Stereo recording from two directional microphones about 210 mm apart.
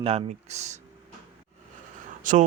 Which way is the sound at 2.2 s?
40° right (ahead or behind).